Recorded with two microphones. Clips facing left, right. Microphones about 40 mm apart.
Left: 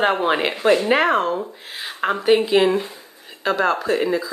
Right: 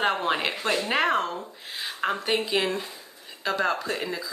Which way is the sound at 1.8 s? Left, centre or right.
Centre.